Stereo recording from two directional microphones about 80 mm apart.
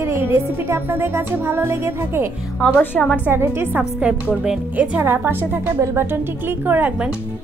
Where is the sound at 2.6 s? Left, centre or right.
Centre.